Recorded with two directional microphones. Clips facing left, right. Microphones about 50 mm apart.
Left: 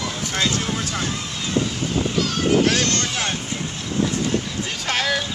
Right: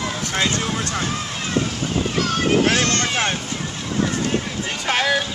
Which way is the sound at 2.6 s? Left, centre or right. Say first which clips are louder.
Right 2 dB; right.